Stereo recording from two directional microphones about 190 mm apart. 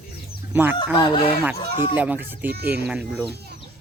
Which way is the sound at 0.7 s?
25° left (ahead or behind).